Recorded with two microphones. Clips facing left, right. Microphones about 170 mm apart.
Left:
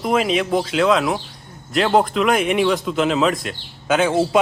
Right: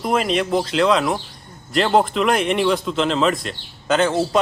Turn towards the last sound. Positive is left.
turn(degrees=10)  # may be behind; listen again after turning